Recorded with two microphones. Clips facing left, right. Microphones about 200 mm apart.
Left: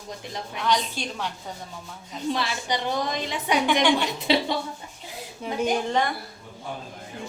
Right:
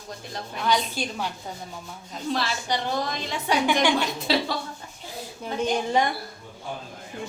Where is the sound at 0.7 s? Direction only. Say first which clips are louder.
Right 1 dB; 5° right (ahead or behind).